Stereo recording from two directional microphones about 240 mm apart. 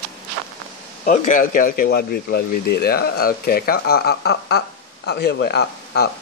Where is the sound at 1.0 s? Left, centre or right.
Left.